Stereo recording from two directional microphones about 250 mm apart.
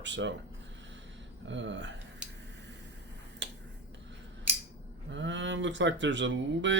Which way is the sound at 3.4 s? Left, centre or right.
Right.